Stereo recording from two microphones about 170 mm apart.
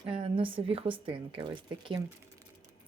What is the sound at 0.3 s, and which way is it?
Speech, 30° right (ahead or behind).